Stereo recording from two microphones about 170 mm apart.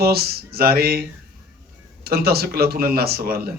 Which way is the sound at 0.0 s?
65° right (ahead or behind).